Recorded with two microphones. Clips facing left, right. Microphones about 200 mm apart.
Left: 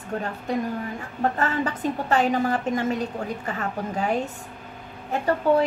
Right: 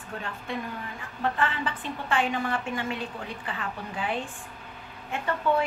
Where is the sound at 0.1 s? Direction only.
40° left (ahead or behind).